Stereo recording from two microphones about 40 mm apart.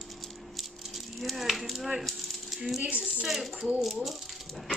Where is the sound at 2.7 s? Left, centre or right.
Right.